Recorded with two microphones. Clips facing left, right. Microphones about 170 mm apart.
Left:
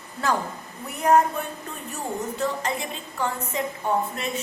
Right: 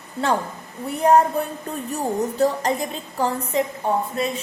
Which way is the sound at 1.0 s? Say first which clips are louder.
Right 3 dB; 35° right (ahead or behind).